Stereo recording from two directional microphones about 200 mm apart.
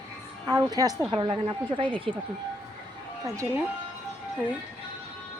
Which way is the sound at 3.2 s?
15° right (ahead or behind).